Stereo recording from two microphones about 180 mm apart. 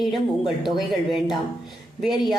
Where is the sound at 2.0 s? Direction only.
Centre (ahead or behind).